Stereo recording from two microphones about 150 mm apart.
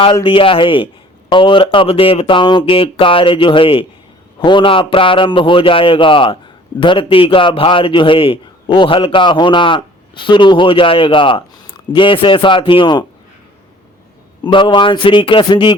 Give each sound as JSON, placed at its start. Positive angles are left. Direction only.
{"t": 0.3, "sound": "a man's voice", "side_deg": 35}
{"t": 14.4, "sound": "a man's voice", "side_deg": 30}